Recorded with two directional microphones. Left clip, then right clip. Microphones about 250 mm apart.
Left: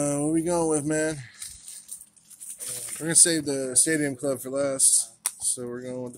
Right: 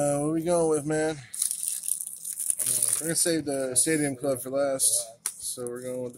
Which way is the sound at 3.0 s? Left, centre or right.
Centre.